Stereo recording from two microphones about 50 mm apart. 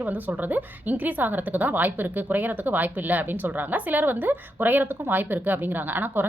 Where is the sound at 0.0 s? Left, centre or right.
Right.